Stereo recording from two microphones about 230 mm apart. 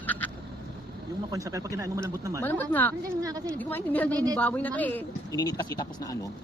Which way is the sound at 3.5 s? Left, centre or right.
Centre.